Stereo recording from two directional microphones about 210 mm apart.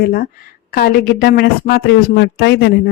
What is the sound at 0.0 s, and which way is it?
A man's voice, 45° left (ahead or behind).